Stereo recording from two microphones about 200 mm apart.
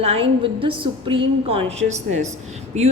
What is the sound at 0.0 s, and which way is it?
A woman's voice, 30° right (ahead or behind).